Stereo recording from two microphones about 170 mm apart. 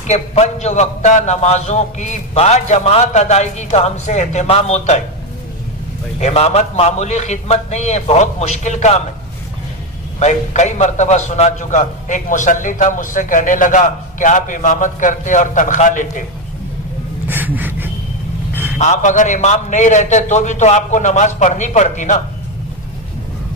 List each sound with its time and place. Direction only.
0.0 s a man's voice: 40° left (ahead or behind)
6.1 s a man's voice: 40° left (ahead or behind)
10.1 s a man's voice: 45° left (ahead or behind)
17.3 s a sound: 10° right (ahead or behind)
18.5 s vehicle: 10° right (ahead or behind)
18.8 s a man's voice: 45° left (ahead or behind)